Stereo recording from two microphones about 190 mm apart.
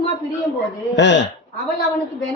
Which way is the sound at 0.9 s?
70° left (ahead or behind).